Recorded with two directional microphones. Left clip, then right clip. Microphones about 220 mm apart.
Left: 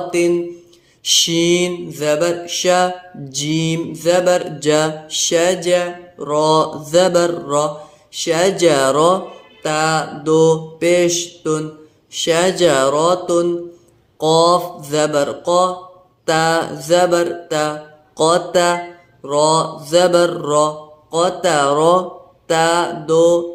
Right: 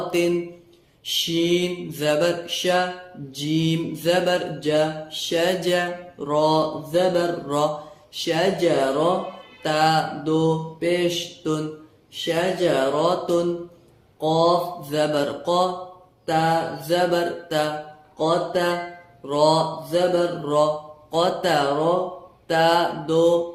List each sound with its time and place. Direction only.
1.0 s mantra: 25° left (ahead or behind)
9.6 s mantra: 15° left (ahead or behind)
14.2 s mantra: 30° left (ahead or behind)